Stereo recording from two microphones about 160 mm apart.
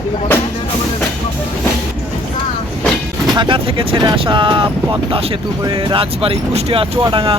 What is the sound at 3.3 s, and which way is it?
Speech, 30° right (ahead or behind).